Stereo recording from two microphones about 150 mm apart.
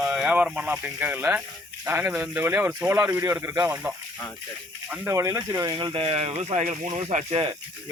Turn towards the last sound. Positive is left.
turn(degrees=-50)  # may be behind; listen again after turning